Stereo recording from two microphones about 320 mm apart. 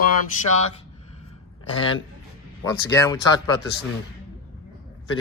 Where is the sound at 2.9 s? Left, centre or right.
Centre.